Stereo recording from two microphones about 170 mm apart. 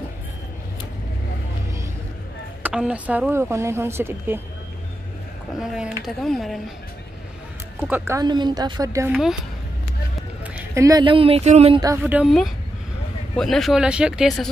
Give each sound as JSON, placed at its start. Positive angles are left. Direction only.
{"t": 2.6, "sound": "speech", "side_deg": -5}
{"t": 5.6, "sound": "speech", "side_deg": -5}
{"t": 7.9, "sound": "speech", "side_deg": -15}
{"t": 10.4, "sound": "speech", "side_deg": -10}
{"t": 12.0, "sound": "speech", "side_deg": -10}